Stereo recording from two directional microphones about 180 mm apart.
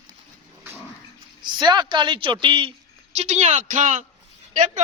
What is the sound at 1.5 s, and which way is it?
A woman's voice, 25° right (ahead or behind).